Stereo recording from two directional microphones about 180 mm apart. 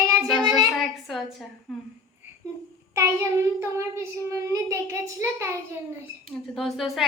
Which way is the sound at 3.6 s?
15° right (ahead or behind).